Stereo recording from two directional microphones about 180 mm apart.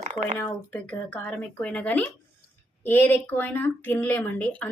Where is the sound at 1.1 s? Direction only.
5° left (ahead or behind).